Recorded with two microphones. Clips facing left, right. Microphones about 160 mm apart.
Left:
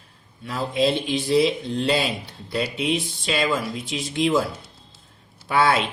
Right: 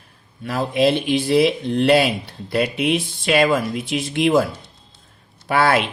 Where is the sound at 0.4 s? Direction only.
65° right (ahead or behind).